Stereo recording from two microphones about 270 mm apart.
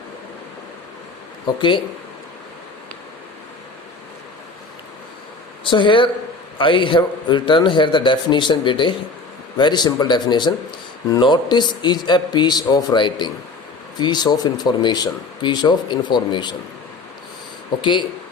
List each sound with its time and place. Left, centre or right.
5.6 s speech: centre